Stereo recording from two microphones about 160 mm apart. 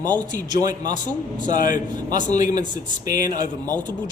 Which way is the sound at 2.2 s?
50° left (ahead or behind).